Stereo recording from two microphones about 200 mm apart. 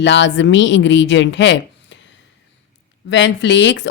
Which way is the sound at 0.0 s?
65° left (ahead or behind).